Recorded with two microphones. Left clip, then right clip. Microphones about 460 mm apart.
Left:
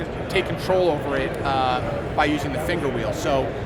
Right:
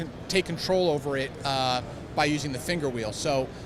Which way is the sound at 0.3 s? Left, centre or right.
Right.